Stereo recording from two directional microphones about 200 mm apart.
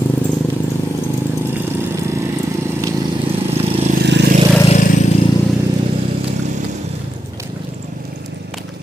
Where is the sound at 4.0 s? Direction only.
55° right (ahead or behind).